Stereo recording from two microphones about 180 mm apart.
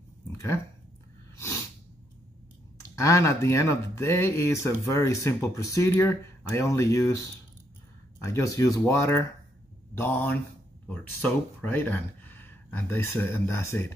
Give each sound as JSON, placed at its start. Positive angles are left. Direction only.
{"t": 2.8, "sound": "speech", "side_deg": 15}
{"t": 8.2, "sound": "speech", "side_deg": 15}